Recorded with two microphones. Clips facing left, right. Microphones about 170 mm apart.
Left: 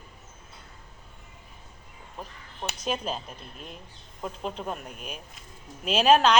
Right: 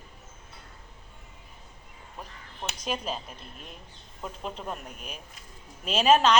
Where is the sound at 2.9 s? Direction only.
Centre (ahead or behind).